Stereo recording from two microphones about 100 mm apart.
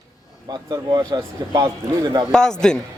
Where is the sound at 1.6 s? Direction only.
45° right (ahead or behind).